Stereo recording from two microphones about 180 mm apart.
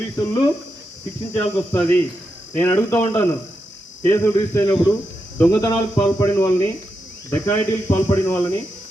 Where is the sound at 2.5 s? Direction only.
10° left (ahead or behind).